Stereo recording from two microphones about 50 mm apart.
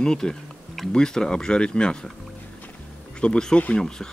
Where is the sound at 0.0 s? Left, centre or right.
Centre.